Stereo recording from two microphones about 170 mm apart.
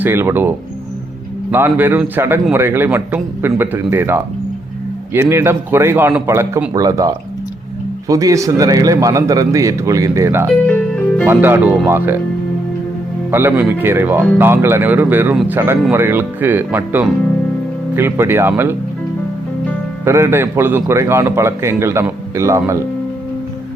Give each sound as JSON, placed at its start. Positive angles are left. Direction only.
{"t": 0.0, "sound": "a man's voice", "side_deg": -15}
{"t": 13.3, "sound": "a man's voice", "side_deg": -10}
{"t": 20.1, "sound": "a man's voice", "side_deg": -15}